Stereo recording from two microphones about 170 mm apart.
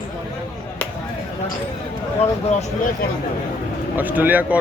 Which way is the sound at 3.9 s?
10° right (ahead or behind).